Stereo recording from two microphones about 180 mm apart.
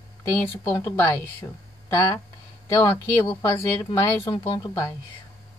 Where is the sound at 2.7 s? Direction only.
20° left (ahead or behind).